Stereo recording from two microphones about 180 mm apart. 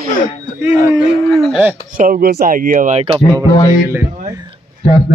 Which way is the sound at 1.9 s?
55° right (ahead or behind).